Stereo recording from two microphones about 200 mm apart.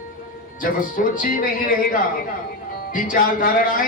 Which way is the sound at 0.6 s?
40° left (ahead or behind).